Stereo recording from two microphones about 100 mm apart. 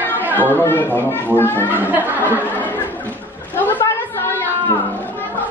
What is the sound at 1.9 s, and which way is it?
Speech, 15° right (ahead or behind).